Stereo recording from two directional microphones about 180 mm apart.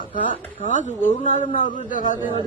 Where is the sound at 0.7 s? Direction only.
45° left (ahead or behind).